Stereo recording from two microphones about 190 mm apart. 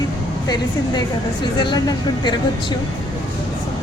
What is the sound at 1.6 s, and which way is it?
Speech, 20° left (ahead or behind).